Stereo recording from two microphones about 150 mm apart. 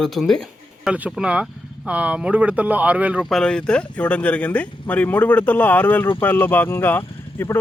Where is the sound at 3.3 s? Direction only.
5° left (ahead or behind).